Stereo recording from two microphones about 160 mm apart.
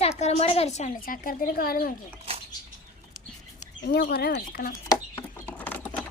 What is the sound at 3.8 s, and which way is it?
Speech, 85° left.